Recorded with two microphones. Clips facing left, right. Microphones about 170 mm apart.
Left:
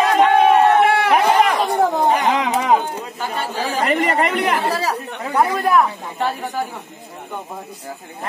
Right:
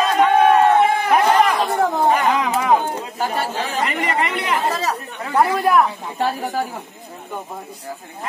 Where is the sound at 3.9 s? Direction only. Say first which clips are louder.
Left 4 dB; 40° left (ahead or behind).